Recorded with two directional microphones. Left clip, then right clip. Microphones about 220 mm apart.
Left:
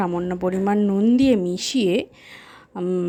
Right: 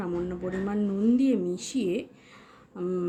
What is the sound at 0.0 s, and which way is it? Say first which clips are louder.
A woman's voice: left 9 dB; 40° left (ahead or behind).